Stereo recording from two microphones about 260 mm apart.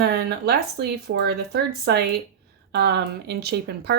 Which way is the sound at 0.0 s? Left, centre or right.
Right.